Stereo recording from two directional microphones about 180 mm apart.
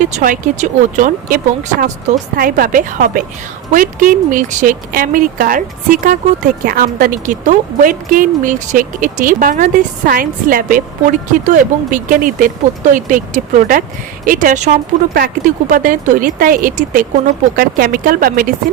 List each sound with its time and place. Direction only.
0.0 s speech: 45° right (ahead or behind)